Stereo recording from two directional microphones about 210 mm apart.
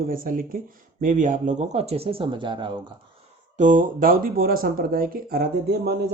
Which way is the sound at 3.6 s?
35° right (ahead or behind).